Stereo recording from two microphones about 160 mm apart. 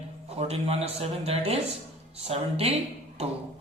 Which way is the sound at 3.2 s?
40° right (ahead or behind).